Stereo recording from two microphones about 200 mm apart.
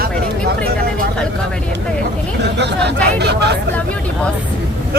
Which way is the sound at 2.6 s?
55° right (ahead or behind).